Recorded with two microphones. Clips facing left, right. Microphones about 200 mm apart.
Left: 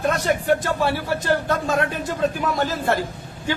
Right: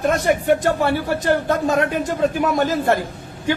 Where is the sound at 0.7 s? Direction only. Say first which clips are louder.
Right 3 dB; 15° right (ahead or behind).